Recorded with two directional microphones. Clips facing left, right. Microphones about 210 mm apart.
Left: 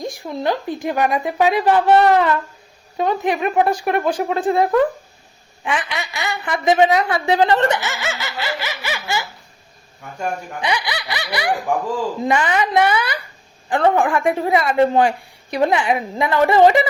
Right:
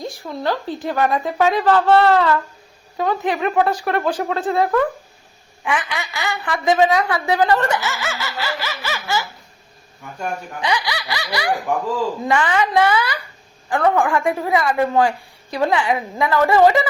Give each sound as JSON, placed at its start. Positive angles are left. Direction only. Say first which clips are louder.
{"t": 0.0, "sound": "a woman's voice", "louder": "left 2 dB", "side_deg": 15}
{"t": 10.6, "sound": "a woman's voice", "louder": "right 1 dB", "side_deg": 20}